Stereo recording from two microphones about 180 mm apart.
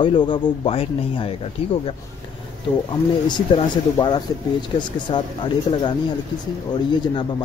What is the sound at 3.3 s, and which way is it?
Speech, 25° left (ahead or behind).